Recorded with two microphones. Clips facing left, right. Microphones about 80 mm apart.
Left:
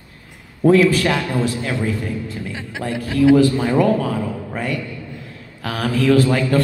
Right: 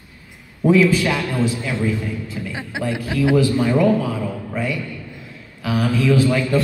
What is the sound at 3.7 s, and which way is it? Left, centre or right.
A man's voice, left.